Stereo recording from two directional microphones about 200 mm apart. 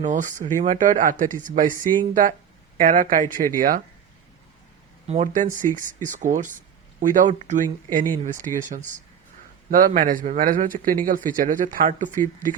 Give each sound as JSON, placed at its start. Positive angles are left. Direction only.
{"t": 0.0, "sound": "speech", "side_deg": -40}
{"t": 5.0, "sound": "speech", "side_deg": -35}